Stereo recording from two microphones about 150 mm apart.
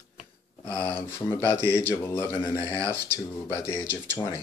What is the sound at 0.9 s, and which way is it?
Speech, 15° left (ahead or behind).